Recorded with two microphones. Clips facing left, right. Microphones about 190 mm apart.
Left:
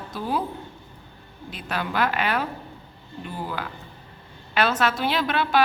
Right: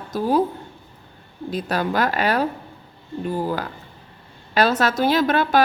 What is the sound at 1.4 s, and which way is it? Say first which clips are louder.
A woman's voice: right 7 dB; 40° right (ahead or behind).